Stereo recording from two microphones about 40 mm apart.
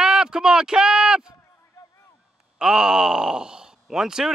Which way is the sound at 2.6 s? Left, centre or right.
Centre.